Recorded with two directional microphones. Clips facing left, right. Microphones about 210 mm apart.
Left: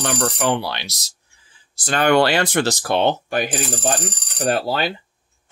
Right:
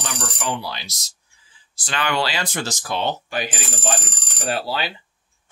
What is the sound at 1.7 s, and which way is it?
Speech, 45° left (ahead or behind).